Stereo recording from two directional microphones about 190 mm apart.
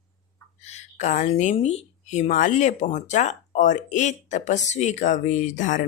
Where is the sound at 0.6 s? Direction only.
35° left (ahead or behind).